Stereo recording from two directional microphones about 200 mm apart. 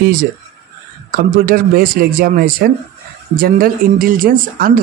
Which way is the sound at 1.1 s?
45° right (ahead or behind).